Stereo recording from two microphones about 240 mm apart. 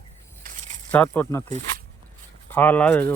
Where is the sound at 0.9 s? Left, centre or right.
Centre.